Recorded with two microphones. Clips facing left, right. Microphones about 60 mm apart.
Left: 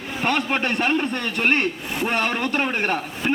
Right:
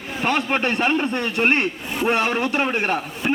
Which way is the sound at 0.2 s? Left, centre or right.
Centre.